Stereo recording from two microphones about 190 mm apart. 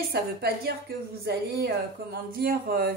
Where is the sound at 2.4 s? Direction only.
50° right (ahead or behind).